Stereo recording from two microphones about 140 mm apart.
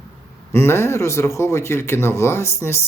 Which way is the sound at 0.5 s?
20° left (ahead or behind).